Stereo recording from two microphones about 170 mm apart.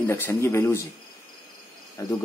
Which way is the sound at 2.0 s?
20° left (ahead or behind).